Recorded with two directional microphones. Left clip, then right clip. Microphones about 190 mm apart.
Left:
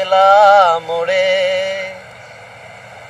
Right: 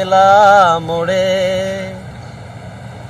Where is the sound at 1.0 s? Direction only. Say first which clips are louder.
Even; 15° left (ahead or behind).